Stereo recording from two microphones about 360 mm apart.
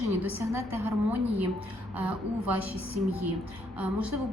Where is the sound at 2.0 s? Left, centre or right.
Centre.